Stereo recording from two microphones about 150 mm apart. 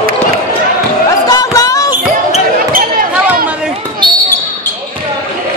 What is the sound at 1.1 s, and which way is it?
Basketball bounce, 25° left (ahead or behind).